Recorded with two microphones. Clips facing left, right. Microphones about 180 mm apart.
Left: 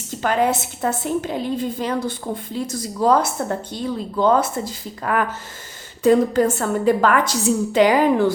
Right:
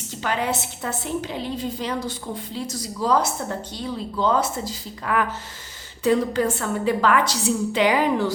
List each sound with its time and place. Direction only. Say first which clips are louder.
0.2 s a woman's voice: left 6 dB; 50° left (ahead or behind)